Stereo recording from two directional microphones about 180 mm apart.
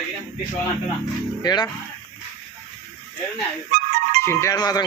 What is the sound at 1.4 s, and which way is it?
Speech, 20° left (ahead or behind).